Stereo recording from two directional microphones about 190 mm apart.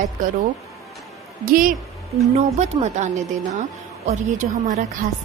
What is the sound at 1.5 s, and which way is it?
A woman's voice, 45° right (ahead or behind).